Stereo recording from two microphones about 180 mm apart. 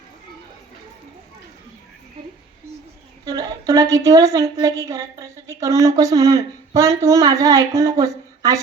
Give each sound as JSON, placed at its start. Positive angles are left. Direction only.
{"t": 3.2, "sound": "a woman's voice", "side_deg": -20}